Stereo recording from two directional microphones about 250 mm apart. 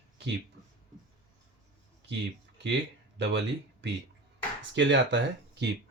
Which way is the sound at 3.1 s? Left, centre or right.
Right.